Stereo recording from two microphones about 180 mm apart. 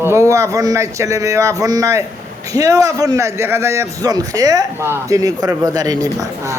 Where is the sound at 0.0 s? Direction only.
15° right (ahead or behind).